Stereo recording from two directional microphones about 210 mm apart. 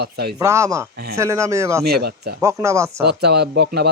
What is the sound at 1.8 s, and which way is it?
Speech, 50° right (ahead or behind).